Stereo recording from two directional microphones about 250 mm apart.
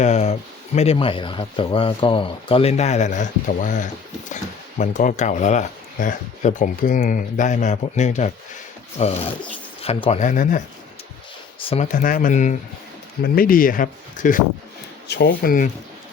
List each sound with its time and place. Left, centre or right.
0.0 s a sound: left
0.8 s speech: left
11.7 s speech: left